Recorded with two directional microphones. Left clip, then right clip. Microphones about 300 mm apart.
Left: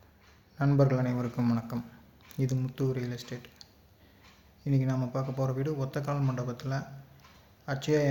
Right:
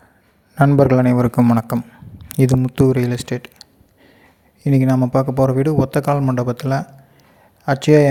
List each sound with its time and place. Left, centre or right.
0.5 s speech: right